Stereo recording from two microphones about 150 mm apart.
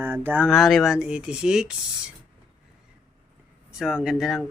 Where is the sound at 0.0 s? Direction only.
15° right (ahead or behind).